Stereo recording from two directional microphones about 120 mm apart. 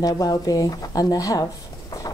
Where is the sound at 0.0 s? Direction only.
35° left (ahead or behind).